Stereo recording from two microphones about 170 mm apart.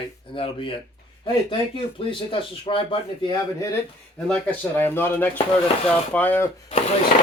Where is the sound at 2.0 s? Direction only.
30° left (ahead or behind).